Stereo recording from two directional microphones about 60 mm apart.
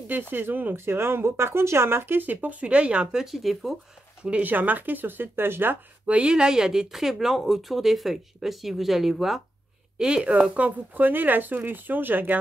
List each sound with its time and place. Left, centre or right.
0.3 s speech: right; by 3.7 s centre
4.2 s speech: right
6.0 s speech: centre
9.9 s speech: centre; by 12.4 s right